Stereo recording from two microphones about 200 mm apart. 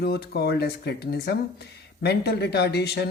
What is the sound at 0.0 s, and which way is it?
Speech, 50° left (ahead or behind).